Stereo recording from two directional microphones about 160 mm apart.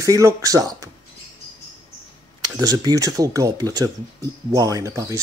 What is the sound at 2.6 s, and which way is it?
Speech, 25° right (ahead or behind).